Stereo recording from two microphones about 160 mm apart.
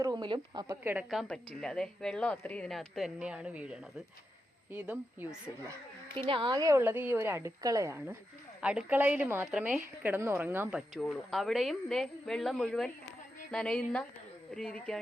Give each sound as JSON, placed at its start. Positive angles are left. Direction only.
{"t": 0.0, "sound": "a woman's voice", "side_deg": -25}
{"t": 1.1, "sound": "a woman's voice", "side_deg": 5}
{"t": 6.1, "sound": "a woman's voice", "side_deg": -30}